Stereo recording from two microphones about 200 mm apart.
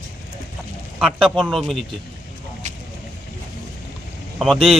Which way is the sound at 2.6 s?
35° right (ahead or behind).